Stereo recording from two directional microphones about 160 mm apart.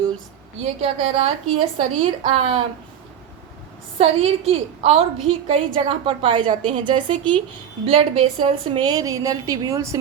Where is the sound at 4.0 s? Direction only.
40° right (ahead or behind).